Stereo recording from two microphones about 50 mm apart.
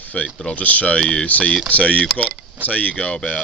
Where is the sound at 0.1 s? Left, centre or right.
Left.